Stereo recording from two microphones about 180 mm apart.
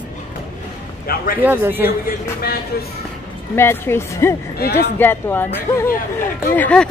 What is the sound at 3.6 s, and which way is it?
Speech, 15° left (ahead or behind).